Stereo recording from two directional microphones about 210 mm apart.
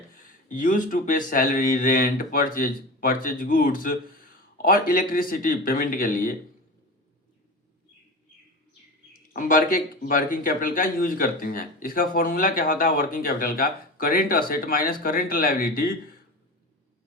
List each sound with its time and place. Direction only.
0.1 s speech: 40° left (ahead or behind)
9.3 s speech: 40° left (ahead or behind)